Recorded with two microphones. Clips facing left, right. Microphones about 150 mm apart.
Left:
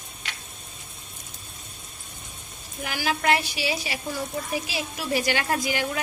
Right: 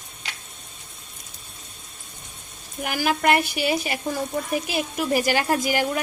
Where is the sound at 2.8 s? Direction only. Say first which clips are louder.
Right 3 dB; 50° right (ahead or behind).